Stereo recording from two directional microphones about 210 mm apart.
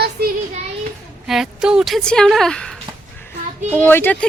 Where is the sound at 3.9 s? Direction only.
10° left (ahead or behind).